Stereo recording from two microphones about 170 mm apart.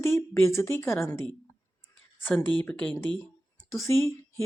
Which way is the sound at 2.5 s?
10° left (ahead or behind).